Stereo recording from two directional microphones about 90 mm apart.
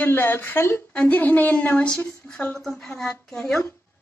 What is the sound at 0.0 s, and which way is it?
A woman's voice, 20° left (ahead or behind).